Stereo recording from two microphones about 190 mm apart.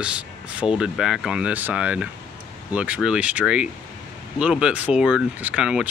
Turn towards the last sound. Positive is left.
turn(degrees=-5)  # may be behind; listen again after turning